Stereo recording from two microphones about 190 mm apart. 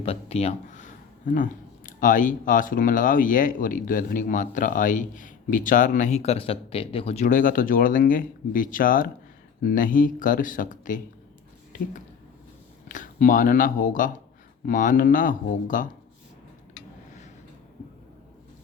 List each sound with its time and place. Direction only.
0.0 s speech: 30° left (ahead or behind)
12.9 s speech: 45° left (ahead or behind)